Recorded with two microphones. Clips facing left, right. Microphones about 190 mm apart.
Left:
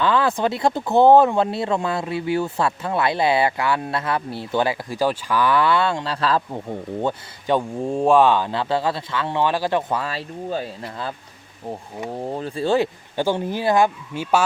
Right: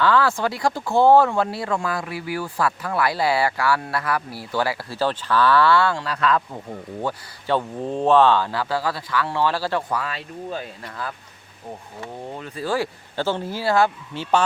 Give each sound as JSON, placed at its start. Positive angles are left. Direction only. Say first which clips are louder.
{"t": 0.0, "sound": "speech", "louder": "even", "side_deg": 20}
{"t": 12.2, "sound": "speech", "louder": "left 6 dB", "side_deg": 35}